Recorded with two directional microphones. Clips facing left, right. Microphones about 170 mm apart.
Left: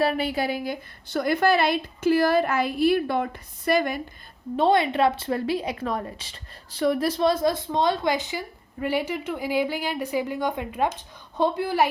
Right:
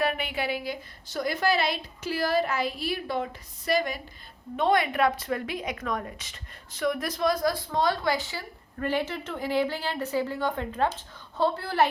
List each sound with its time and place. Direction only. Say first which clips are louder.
0.0 s a woman's voice: left 5 dB; 35° left (ahead or behind); by 4.0 s 55° left (ahead or behind)
4.5 s a woman's voice: left 4 dB; 30° left (ahead or behind); by 11.9 s 10° left (ahead or behind)